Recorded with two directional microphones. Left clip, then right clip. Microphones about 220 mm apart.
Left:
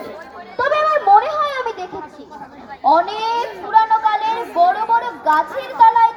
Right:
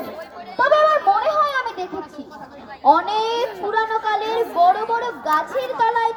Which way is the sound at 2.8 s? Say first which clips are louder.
Left 1 dB; 50° right (ahead or behind).